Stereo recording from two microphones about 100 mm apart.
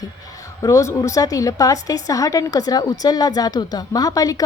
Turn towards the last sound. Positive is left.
turn(degrees=35)  # may be behind; listen again after turning